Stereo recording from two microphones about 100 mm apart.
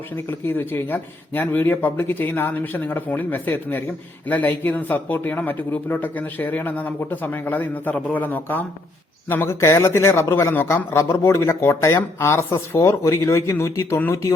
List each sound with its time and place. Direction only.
0.3 s speech: 20° left (ahead or behind)